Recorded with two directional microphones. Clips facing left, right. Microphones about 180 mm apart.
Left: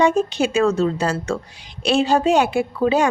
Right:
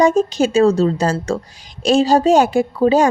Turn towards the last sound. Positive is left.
turn(degrees=-40)  # may be behind; listen again after turning